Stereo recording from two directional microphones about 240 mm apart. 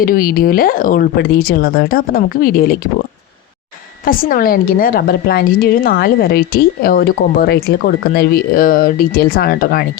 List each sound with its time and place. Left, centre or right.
0.0 s a woman's voice: left
4.0 s a woman's voice: left